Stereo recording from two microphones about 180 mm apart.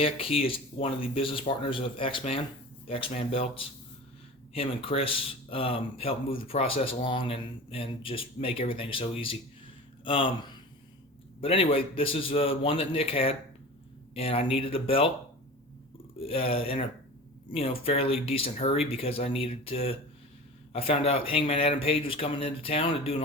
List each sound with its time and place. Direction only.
0.0 s speech: 30° left (ahead or behind)
16.2 s speech: 30° left (ahead or behind)